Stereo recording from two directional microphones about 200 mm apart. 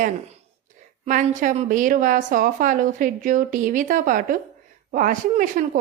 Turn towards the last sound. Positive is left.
turn(degrees=-40)  # may be behind; listen again after turning